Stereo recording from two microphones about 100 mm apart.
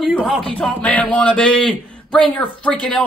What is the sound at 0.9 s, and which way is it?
A man's voice, 15° left (ahead or behind).